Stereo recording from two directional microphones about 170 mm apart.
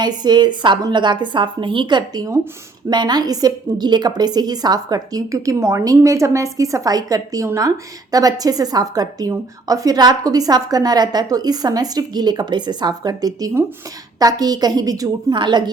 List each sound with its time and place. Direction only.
0.0 s speech: 25° right (ahead or behind)